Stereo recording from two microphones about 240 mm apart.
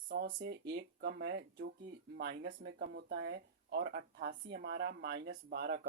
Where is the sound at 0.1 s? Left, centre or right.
Right.